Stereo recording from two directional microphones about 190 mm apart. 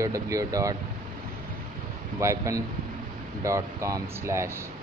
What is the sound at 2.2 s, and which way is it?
Speech, 15° right (ahead or behind).